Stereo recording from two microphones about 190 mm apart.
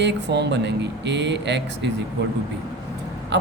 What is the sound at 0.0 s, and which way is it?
Speech, 65° right (ahead or behind).